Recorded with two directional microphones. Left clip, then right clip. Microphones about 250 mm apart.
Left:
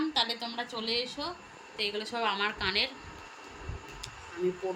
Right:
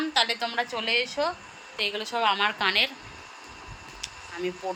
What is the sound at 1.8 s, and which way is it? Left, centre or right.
A woman's voice, centre.